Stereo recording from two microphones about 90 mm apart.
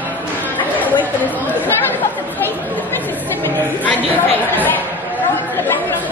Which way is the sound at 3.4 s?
20° left (ahead or behind).